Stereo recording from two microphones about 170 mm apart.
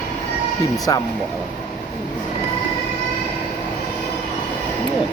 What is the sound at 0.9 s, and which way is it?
Speech, 20° left (ahead or behind).